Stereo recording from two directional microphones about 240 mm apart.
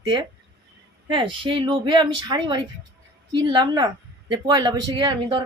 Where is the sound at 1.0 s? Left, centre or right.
Centre.